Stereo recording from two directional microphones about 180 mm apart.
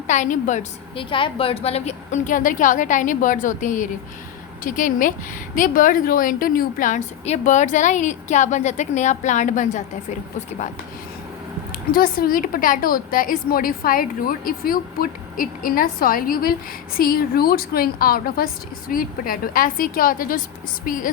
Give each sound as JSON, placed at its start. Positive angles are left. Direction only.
{"t": 0.1, "sound": "a woman's voice", "side_deg": 45}
{"t": 0.9, "sound": "a woman's voice", "side_deg": 30}
{"t": 11.7, "sound": "a woman's voice", "side_deg": 55}